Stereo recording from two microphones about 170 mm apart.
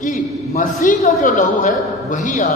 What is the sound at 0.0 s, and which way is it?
A man's voice, 50° left (ahead or behind).